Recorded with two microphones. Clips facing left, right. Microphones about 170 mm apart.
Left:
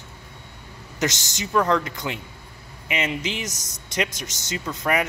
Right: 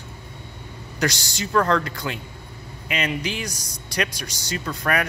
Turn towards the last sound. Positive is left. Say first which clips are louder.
# even
turn(degrees=20)  # may be behind; listen again after turning